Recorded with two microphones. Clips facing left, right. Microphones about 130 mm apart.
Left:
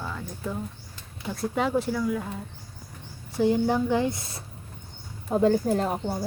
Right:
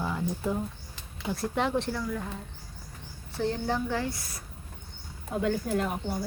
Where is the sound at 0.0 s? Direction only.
15° right (ahead or behind).